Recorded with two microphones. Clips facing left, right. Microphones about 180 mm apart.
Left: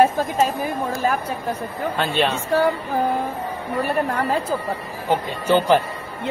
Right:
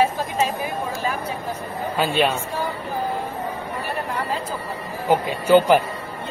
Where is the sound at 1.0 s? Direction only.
45° left (ahead or behind).